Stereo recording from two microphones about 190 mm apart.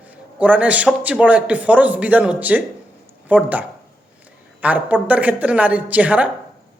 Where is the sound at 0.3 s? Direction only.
5° right (ahead or behind).